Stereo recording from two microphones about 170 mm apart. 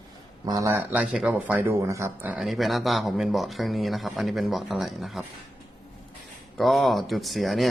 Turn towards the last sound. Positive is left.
turn(degrees=0)  # may be behind; listen again after turning